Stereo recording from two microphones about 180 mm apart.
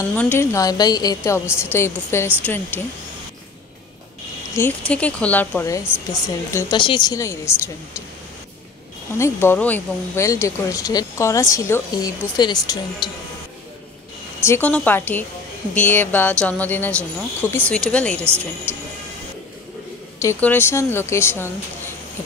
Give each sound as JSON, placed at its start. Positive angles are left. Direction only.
{"t": 0.1, "sound": "a woman's voice", "side_deg": 10}
{"t": 4.6, "sound": "a woman's voice", "side_deg": 10}
{"t": 6.5, "sound": "a woman's voice", "side_deg": 25}
{"t": 9.2, "sound": "a woman's voice", "side_deg": 15}
{"t": 14.4, "sound": "a woman's voice", "side_deg": 10}
{"t": 18.2, "sound": "a woman's voice", "side_deg": -15}
{"t": 20.2, "sound": "a woman's voice", "side_deg": 10}